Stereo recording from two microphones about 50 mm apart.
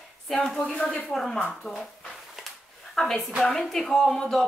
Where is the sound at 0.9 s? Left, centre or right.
Centre.